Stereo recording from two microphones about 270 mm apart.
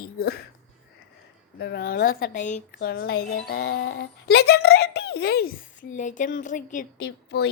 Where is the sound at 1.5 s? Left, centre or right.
Left.